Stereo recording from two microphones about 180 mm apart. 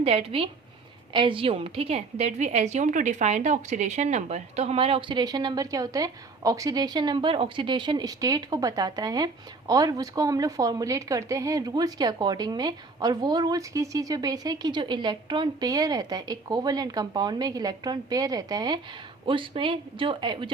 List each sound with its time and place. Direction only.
0.0 s a woman's voice: 35° right (ahead or behind)